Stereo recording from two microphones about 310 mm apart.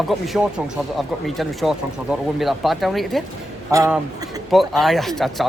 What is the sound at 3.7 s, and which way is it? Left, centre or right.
Speech, centre.